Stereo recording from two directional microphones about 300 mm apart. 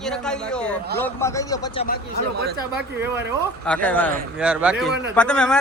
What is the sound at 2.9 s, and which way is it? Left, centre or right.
Speech, centre.